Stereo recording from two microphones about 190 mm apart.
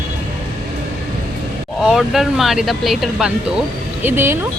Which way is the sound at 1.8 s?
Centre (ahead or behind).